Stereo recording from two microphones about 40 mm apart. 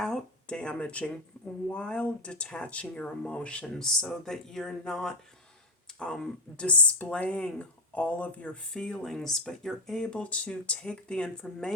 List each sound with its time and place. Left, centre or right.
0.4 s speech: left
3.8 s speech: centre; by 8.5 s left
8.8 s speech: left
9.1 s speech: centre
10.0 s speech: left